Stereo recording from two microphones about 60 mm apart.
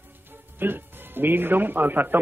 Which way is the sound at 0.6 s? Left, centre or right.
Right.